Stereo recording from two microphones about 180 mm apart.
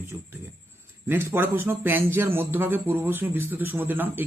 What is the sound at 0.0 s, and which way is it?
Speech, 10° right (ahead or behind).